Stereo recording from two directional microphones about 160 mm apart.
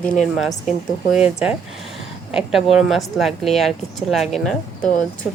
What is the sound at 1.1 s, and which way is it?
A woman's voice, 5° right (ahead or behind).